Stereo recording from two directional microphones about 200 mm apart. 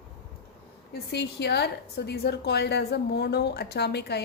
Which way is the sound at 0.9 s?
55° left (ahead or behind).